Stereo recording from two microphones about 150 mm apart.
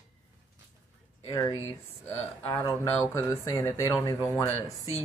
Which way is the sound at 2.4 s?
30° left (ahead or behind).